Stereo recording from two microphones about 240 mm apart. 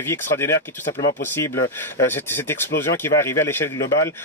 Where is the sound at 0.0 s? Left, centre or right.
Centre.